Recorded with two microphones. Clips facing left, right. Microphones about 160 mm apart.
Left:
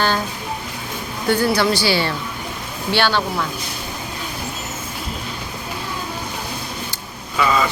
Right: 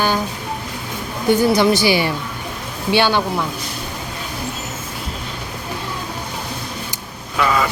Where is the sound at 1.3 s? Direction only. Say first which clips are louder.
Right 3 dB; 20° right (ahead or behind).